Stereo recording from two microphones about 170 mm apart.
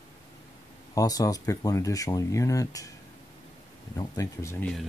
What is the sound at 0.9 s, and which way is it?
Speech, 20° left (ahead or behind).